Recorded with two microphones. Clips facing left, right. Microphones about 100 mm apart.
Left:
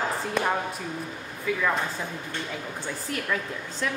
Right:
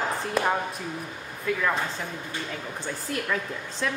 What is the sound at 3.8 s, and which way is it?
Speech, centre (ahead or behind).